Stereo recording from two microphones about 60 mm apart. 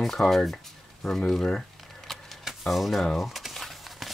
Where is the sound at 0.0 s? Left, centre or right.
Centre.